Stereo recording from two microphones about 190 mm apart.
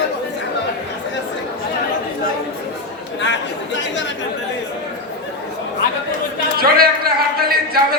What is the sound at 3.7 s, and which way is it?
Chatter, 70° left (ahead or behind).